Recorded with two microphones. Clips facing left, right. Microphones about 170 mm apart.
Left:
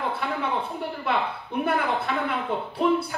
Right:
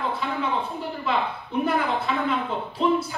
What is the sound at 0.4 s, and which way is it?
Speech, 65° left (ahead or behind).